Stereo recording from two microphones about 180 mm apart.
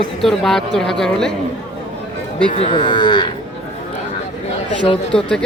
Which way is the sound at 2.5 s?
30° left (ahead or behind).